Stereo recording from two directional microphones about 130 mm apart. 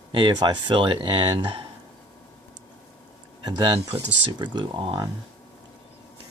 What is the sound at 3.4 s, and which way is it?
Speech, 35° right (ahead or behind).